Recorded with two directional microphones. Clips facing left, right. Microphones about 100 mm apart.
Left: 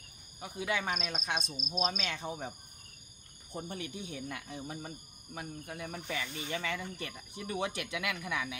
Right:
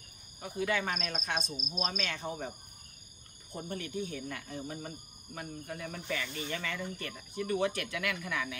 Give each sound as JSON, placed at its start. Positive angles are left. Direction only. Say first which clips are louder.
{"t": 0.4, "sound": "speech", "louder": "right 2 dB", "side_deg": 15}
{"t": 0.9, "sound": "cricket", "louder": "even", "side_deg": 5}
{"t": 1.9, "sound": "speech", "louder": "even", "side_deg": 15}
{"t": 3.6, "sound": "speech", "louder": "right 7 dB", "side_deg": 15}